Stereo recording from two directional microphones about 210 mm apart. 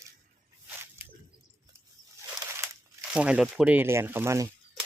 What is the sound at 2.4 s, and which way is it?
Crumpling, 15° right (ahead or behind).